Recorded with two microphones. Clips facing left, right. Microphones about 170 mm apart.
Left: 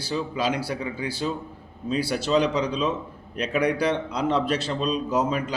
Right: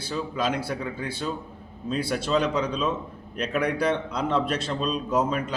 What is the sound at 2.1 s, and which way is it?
Speech, centre (ahead or behind).